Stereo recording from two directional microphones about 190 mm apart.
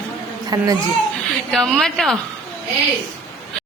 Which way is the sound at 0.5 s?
20° right (ahead or behind).